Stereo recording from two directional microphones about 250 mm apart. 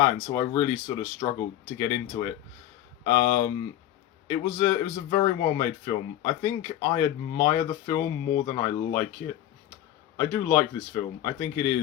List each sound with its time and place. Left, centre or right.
0.3 s speech: centre
10.2 s speech: centre